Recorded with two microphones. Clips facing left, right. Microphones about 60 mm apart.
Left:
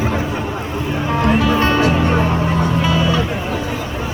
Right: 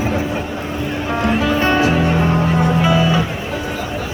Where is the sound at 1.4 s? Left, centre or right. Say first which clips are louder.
Even; centre.